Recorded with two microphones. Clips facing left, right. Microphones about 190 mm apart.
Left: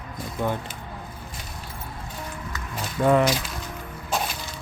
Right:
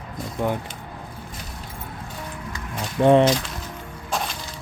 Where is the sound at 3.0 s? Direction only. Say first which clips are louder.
Right 4 dB; 25° right (ahead or behind).